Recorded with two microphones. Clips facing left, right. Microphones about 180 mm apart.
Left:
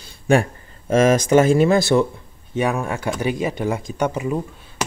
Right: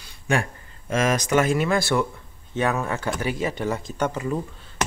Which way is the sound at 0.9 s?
25° left (ahead or behind).